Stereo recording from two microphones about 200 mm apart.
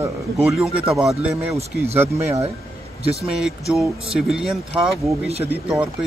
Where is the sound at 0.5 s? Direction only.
5° right (ahead or behind).